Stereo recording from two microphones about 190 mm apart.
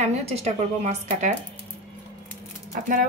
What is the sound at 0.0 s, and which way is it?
Speech, 35° right (ahead or behind).